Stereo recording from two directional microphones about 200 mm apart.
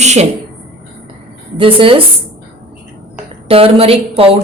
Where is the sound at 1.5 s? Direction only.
25° right (ahead or behind).